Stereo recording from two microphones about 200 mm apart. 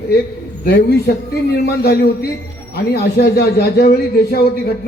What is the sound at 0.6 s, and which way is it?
A man's voice, 55° left (ahead or behind).